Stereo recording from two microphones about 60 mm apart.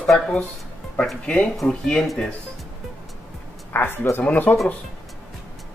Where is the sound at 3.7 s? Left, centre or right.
Left.